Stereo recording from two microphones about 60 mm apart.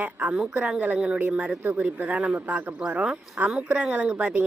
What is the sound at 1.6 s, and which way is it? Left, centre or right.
Speech, right.